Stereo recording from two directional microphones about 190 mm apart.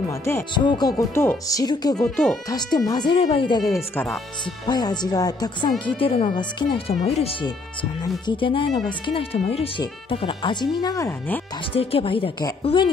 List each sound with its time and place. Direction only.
0.1 s speech: 15° left (ahead or behind)
2.0 s speech: centre (ahead or behind)
2.9 s speech: 25° left (ahead or behind)
4.6 s speech: 20° left (ahead or behind)
11.7 s speech: 30° left (ahead or behind)